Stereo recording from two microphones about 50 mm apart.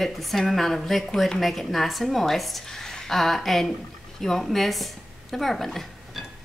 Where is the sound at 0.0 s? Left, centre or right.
Centre.